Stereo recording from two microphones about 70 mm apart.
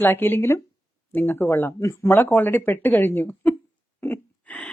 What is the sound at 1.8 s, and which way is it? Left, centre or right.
Speech, left.